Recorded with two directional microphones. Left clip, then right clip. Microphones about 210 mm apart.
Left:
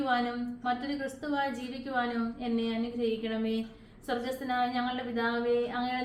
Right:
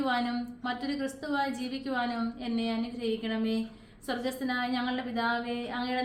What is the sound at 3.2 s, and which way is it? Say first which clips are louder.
A woman's voice: even; 45° right (ahead or behind).